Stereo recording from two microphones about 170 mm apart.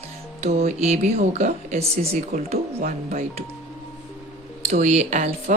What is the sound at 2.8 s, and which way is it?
Speech, 55° right (ahead or behind).